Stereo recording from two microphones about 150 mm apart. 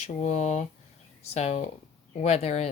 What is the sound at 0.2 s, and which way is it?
A woman's voice, 50° left (ahead or behind).